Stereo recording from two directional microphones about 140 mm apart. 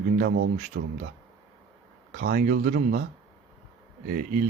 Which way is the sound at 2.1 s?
90° right.